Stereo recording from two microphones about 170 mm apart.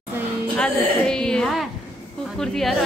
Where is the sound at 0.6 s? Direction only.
5° left (ahead or behind).